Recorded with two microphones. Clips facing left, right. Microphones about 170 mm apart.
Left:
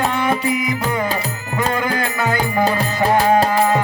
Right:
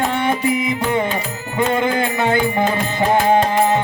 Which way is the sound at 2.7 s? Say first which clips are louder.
Left 1 dB; 35° left (ahead or behind).